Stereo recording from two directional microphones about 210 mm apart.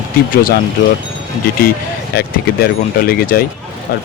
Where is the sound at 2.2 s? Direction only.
45° left (ahead or behind).